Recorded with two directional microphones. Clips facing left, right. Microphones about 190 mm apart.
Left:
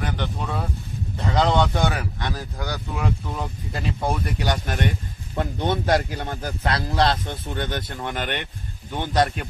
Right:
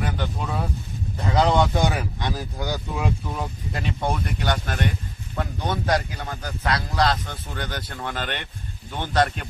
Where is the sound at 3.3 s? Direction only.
Centre (ahead or behind).